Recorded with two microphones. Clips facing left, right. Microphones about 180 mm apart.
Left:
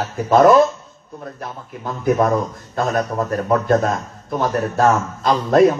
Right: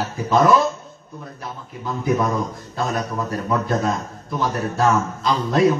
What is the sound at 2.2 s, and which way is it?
A man's voice, 50° left (ahead or behind).